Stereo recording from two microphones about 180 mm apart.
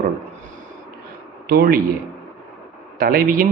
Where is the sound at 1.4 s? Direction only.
55° right (ahead or behind).